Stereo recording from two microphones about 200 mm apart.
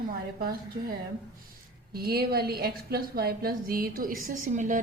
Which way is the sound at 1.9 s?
50° right (ahead or behind).